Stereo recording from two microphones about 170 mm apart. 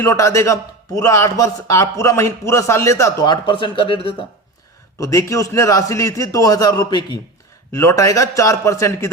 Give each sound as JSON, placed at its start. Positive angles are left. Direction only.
{"t": 0.0, "sound": "a man's voice", "side_deg": 15}
{"t": 4.9, "sound": "a man's voice", "side_deg": 20}